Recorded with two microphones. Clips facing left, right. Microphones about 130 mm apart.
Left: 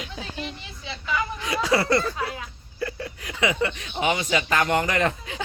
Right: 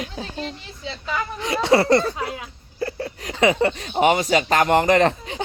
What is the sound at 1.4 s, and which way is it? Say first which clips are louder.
Speech: right 7 dB; 30° right (ahead or behind).